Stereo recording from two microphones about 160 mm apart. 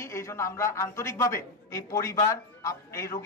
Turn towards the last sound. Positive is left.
turn(degrees=20)  # may be behind; listen again after turning